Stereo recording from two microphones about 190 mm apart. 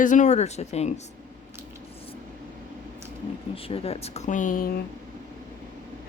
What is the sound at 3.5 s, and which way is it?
Speech, 30° left (ahead or behind).